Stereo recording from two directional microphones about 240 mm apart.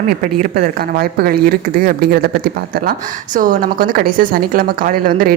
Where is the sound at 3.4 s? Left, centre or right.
Right.